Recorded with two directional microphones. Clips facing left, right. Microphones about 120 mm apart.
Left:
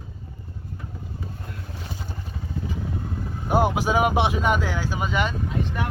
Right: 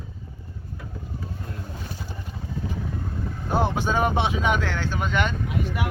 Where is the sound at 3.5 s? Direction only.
10° left (ahead or behind).